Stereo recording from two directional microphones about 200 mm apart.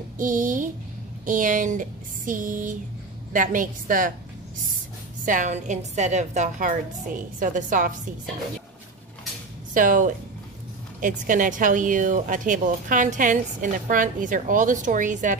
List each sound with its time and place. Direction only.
0.2 s a woman's voice: 40° right (ahead or behind)
5.2 s a woman's voice: 40° right (ahead or behind)
9.8 s a woman's voice: 40° right (ahead or behind)